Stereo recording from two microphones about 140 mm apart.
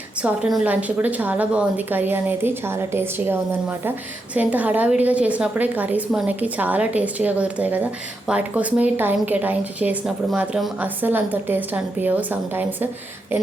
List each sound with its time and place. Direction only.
0.2 s a woman's voice: 5° right (ahead or behind)